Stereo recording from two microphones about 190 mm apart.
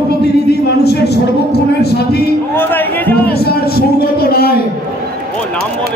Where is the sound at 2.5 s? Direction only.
10° left (ahead or behind).